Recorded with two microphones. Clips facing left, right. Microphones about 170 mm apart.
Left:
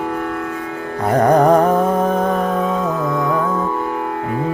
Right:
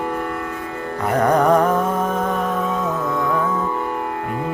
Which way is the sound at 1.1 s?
35° left (ahead or behind).